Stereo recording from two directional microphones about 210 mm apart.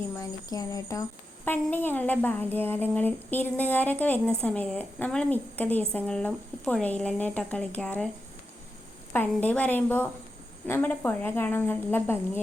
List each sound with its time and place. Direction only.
0.2 s a woman's voice: 15° left (ahead or behind)
9.1 s a woman's voice: 10° left (ahead or behind)